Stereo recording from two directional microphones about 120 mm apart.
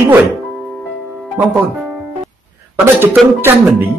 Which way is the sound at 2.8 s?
20° right (ahead or behind).